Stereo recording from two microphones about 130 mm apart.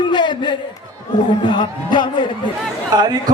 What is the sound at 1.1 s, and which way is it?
A man's voice, 35° left (ahead or behind).